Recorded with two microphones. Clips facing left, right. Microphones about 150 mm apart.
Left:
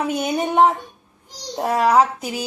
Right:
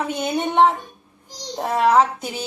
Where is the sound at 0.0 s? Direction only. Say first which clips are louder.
Left 1 dB; 5° left (ahead or behind).